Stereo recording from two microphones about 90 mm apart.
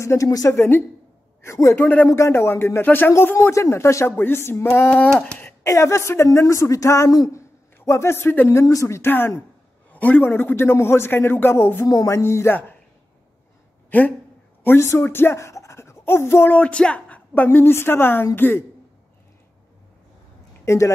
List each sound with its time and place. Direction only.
0.0 s speech: 35° left (ahead or behind)
0.6 s a man's voice: 25° left (ahead or behind)
1.8 s a man's voice: 20° left (ahead or behind)
2.0 s a man's voice: 30° left (ahead or behind)
13.8 s speech: 20° left (ahead or behind)
16.5 s a man's voice: 15° left (ahead or behind)
20.6 s speech: 35° left (ahead or behind)